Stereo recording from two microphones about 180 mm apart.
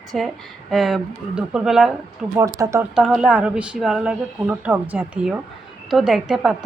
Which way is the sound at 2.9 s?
5° right (ahead or behind).